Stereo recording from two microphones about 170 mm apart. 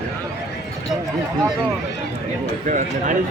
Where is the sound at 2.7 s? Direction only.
50° right (ahead or behind).